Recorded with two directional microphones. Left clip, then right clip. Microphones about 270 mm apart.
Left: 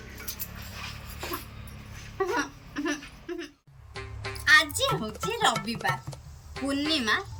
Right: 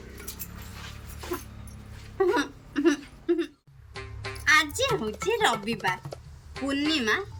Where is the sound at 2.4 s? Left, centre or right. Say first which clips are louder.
Right 3 dB; right.